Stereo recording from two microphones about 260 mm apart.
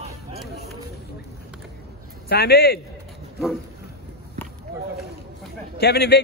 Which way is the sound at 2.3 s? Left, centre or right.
Left.